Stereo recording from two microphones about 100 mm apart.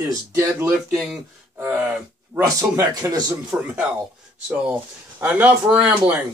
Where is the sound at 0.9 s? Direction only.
Centre (ahead or behind).